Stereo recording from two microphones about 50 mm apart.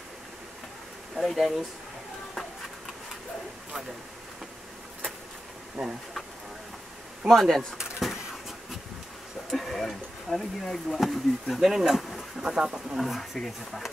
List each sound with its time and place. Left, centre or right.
1.1 s speech: centre
5.8 s speech: centre
7.2 s speech: centre
8.0 s a sound: centre
9.5 s speech: centre
12.0 s a sound: centre
12.4 s speech: centre
12.9 s speech: centre